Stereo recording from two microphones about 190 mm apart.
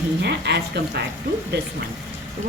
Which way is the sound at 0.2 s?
60° right (ahead or behind).